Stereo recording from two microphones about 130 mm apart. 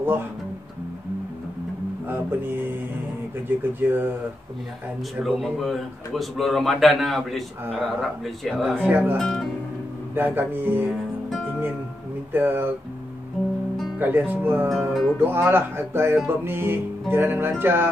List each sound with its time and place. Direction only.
3.4 s speech: 15° right (ahead or behind)
5.2 s a man's voice: centre (ahead or behind)
8.8 s speech: 15° right (ahead or behind)
9.2 s a man's voice: 5° left (ahead or behind)
10.1 s speech: 15° right (ahead or behind)
12.3 s speech: 15° right (ahead or behind)
13.9 s speech: 15° right (ahead or behind)
14.7 s a man's voice: centre (ahead or behind)
15.1 s speech: 15° right (ahead or behind)